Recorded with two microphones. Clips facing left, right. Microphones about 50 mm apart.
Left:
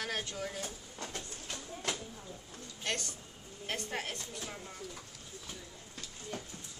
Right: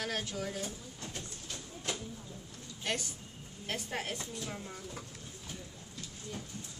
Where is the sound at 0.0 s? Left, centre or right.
Centre.